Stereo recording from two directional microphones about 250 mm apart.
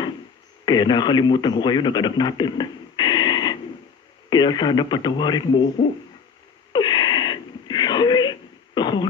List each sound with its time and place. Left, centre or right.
0.7 s speech: centre
6.7 s wheeze: centre